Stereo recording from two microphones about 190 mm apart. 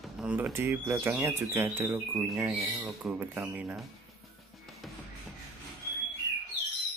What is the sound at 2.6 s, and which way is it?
Speech, 15° right (ahead or behind).